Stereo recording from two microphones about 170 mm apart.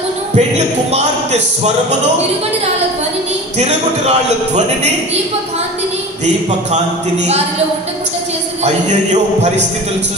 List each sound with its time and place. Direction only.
0.9 s music: 40° right (ahead or behind)
3.5 s music: 40° right (ahead or behind)
8.8 s a man's voice: 45° right (ahead or behind)